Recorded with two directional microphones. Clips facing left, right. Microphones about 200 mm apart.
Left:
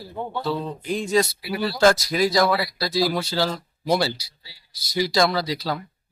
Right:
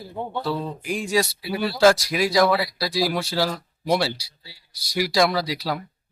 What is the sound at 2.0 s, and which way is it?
Speech, 5° right (ahead or behind).